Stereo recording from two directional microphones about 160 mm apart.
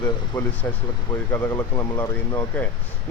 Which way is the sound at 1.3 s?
15° left (ahead or behind).